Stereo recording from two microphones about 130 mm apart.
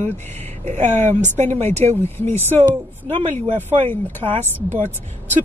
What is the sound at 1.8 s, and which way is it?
Speech, 55° right (ahead or behind).